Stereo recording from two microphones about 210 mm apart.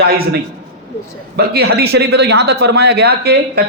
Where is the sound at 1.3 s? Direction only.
50° right (ahead or behind).